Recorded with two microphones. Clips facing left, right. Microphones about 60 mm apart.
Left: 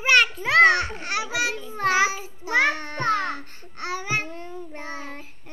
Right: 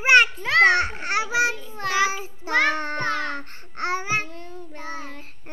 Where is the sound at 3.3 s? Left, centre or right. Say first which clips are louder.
Right 2 dB; right.